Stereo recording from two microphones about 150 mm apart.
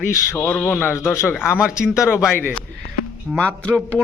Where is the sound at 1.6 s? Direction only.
5° right (ahead or behind).